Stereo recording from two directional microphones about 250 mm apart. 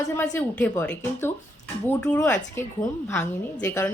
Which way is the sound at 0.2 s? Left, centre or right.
Centre.